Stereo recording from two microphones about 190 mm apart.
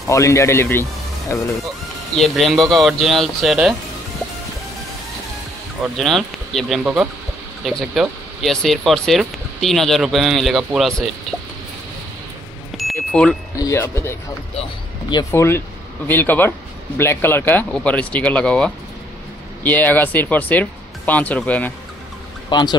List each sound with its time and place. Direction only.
0.1 s a man's voice: 15° left (ahead or behind)
2.1 s speech: centre (ahead or behind)
5.9 s speech: centre (ahead or behind)
12.9 s wind chime: 5° left (ahead or behind)
13.6 s a man's voice: 15° left (ahead or behind)
22.5 s speech: 25° left (ahead or behind)